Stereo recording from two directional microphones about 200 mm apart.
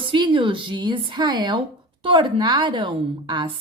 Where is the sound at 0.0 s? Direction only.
25° right (ahead or behind).